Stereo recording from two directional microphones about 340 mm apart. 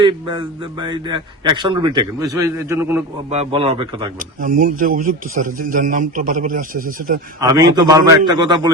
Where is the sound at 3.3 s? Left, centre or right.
Centre.